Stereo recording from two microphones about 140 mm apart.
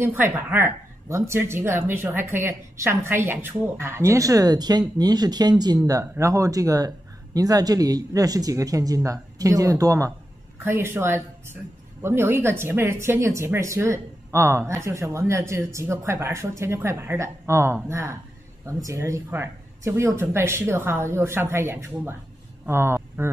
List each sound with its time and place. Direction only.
0.0 s speech: 15° right (ahead or behind)